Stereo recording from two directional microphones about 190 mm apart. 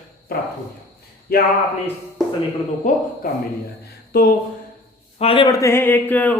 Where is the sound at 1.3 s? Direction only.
55° left (ahead or behind).